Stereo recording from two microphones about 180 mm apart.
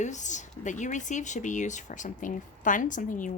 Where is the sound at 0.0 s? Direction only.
40° left (ahead or behind).